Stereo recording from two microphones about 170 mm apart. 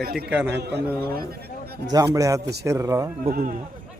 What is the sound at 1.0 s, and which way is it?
Speech, 65° right (ahead or behind).